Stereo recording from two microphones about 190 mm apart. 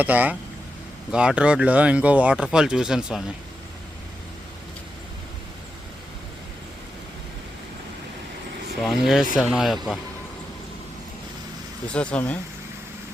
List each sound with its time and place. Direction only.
0.0 s speech: 10° right (ahead or behind)
8.8 s speech: centre (ahead or behind)
11.9 s speech: 5° left (ahead or behind)